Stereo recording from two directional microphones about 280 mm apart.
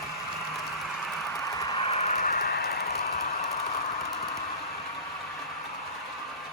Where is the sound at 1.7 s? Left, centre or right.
Left.